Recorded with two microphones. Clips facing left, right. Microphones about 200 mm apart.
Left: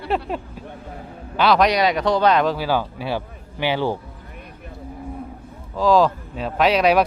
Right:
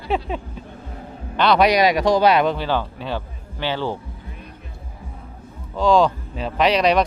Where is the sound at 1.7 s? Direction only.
10° right (ahead or behind).